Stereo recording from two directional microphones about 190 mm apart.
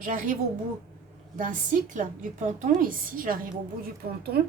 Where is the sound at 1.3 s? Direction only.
45° right (ahead or behind).